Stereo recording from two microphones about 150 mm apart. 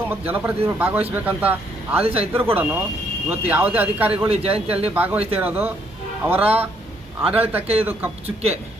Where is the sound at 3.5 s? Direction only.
10° right (ahead or behind).